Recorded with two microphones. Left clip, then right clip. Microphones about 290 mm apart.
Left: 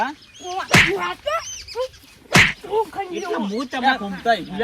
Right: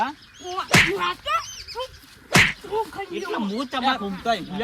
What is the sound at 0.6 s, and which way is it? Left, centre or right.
Speech, centre.